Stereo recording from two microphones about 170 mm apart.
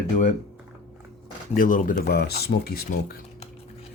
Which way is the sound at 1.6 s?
50° left (ahead or behind).